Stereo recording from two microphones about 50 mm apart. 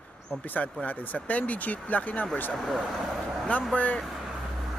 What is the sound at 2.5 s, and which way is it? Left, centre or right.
Speech, centre.